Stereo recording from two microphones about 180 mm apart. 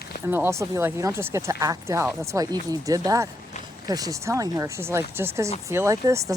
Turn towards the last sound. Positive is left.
turn(degrees=-20)  # may be behind; listen again after turning